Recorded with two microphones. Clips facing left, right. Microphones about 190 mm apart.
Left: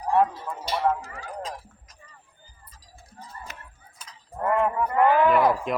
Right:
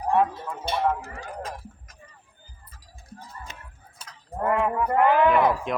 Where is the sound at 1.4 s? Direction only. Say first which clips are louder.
Even; 55° right (ahead or behind).